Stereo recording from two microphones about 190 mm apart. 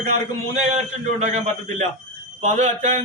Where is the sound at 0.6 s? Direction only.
35° right (ahead or behind).